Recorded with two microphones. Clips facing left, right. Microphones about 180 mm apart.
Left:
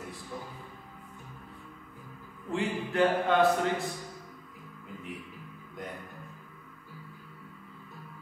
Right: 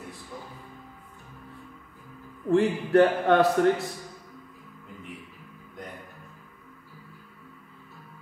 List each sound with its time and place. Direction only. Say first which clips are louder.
2.5 s a man's voice: right 10 dB; 70° right (ahead or behind)